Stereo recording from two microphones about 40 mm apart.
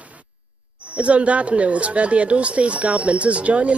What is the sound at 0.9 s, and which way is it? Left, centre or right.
Speech, right.